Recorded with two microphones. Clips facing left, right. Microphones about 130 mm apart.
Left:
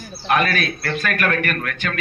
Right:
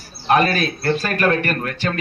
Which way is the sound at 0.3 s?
30° right (ahead or behind).